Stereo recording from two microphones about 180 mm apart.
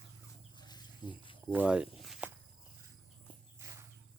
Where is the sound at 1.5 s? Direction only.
10° right (ahead or behind).